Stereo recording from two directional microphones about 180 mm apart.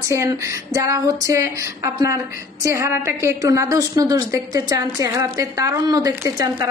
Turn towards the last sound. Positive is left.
turn(degrees=-20)  # may be behind; listen again after turning